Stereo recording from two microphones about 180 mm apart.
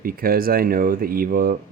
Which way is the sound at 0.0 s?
55° right (ahead or behind).